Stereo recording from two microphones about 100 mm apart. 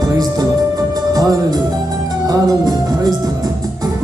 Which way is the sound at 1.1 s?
40° right (ahead or behind).